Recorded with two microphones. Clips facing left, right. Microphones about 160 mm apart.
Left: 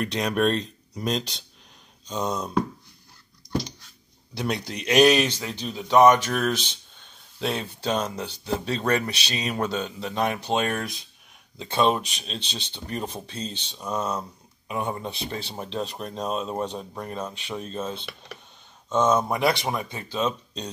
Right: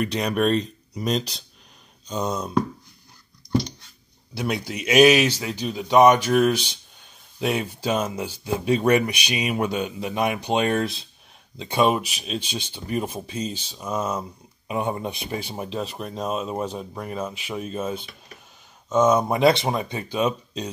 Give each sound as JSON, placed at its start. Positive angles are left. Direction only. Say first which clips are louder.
{"t": 0.0, "sound": "speech", "louder": "right 1 dB", "side_deg": 0}
{"t": 4.3, "sound": "speech", "louder": "right 2 dB", "side_deg": -5}
{"t": 11.5, "sound": "speech", "louder": "right 2 dB", "side_deg": -15}
{"t": 14.7, "sound": "speech", "louder": "right 3 dB", "side_deg": -20}